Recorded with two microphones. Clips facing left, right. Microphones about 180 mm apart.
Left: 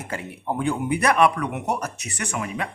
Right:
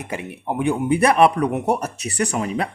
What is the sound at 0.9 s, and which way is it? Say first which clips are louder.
Speech: right 4 dB; 30° right (ahead or behind).